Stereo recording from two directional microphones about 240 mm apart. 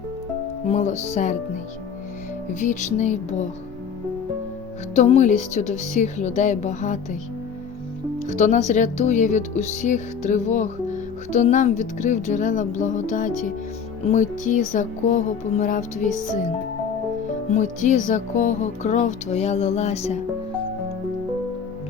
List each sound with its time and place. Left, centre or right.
0.7 s music: left
2.5 s speech: left
4.9 s music: left
8.4 s speech: left
17.5 s music: left